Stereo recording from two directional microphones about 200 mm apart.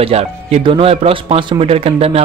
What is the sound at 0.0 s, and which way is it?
Speech, 30° right (ahead or behind).